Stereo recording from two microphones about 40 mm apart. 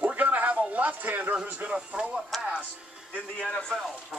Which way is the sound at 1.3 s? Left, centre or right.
Right.